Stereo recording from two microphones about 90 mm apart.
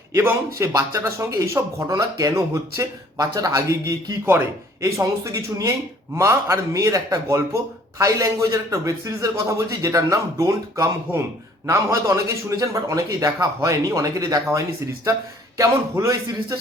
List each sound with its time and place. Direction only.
0.1 s speech: 30° right (ahead or behind)